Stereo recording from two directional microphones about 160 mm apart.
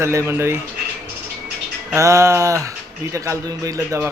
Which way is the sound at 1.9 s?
20° right (ahead or behind).